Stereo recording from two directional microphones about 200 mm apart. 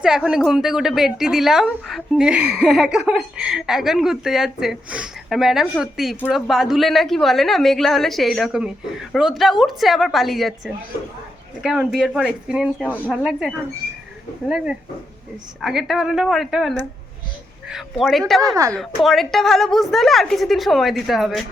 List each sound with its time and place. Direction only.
0.3 s speech: centre (ahead or behind)
18.4 s a woman's voice: 15° right (ahead or behind)
19.0 s speech: centre (ahead or behind)